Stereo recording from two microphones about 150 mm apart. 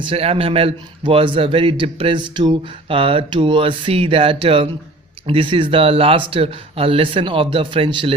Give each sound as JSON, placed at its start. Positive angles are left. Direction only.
{"t": 0.0, "sound": "a man's voice", "side_deg": -40}